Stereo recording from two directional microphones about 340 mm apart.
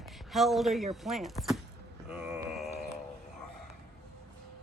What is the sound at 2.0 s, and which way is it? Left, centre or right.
Mantra, centre.